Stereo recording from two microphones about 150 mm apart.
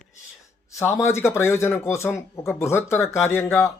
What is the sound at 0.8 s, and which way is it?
Speech, 20° left (ahead or behind).